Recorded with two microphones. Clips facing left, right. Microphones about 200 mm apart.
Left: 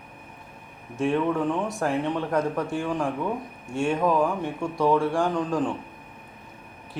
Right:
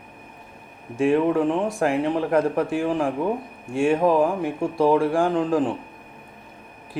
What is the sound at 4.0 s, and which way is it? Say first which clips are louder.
Speech: right 4 dB; 30° right (ahead or behind).